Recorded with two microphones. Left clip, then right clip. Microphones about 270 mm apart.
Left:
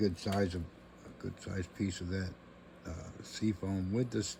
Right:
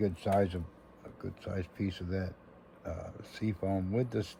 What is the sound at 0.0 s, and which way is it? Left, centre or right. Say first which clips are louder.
Speech: right 4 dB; centre.